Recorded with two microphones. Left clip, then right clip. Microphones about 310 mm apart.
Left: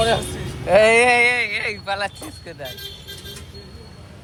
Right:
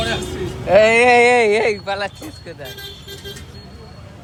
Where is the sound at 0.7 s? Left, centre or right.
Centre.